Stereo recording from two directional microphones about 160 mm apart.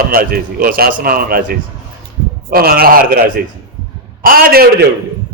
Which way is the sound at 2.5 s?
65° right (ahead or behind).